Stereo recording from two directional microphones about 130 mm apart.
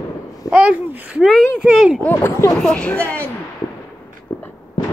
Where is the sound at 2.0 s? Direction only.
20° left (ahead or behind).